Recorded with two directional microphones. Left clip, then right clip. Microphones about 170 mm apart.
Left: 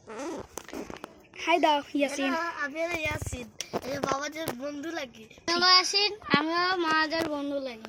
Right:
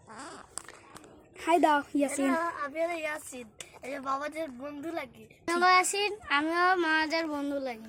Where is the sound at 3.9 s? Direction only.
15° right (ahead or behind).